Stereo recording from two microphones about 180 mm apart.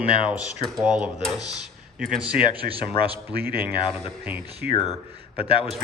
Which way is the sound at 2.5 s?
30° left (ahead or behind).